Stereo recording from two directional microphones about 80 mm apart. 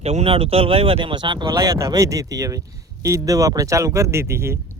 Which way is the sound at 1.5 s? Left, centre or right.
Right.